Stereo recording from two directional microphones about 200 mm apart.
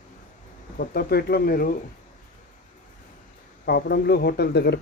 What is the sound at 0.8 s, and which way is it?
Speech, 50° left (ahead or behind).